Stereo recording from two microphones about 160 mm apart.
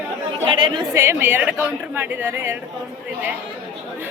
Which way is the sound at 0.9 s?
15° right (ahead or behind).